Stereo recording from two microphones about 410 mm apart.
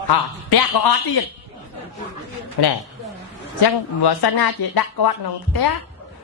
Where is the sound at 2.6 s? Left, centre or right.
Left.